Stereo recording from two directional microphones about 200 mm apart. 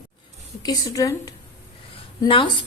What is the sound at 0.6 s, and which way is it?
A woman's voice, 15° left (ahead or behind).